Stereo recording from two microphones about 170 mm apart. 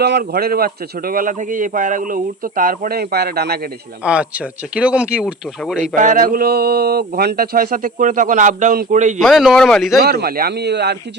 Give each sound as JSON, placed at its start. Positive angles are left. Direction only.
{"t": 0.0, "sound": "speech", "side_deg": -70}
{"t": 4.0, "sound": "speech", "side_deg": -5}
{"t": 6.0, "sound": "speech", "side_deg": -50}
{"t": 9.2, "sound": "speech", "side_deg": 0}
{"t": 10.0, "sound": "speech", "side_deg": -65}